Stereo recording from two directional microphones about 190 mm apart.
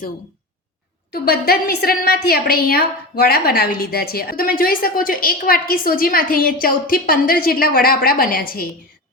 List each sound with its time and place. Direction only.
1.1 s a woman's voice: 50° left (ahead or behind)